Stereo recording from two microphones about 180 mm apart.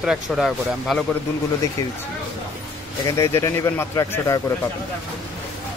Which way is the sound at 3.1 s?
15° left (ahead or behind).